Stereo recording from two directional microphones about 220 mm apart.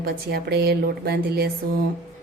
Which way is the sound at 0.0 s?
45° right (ahead or behind).